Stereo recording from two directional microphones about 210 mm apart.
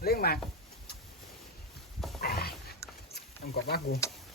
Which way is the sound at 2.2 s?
45° left (ahead or behind).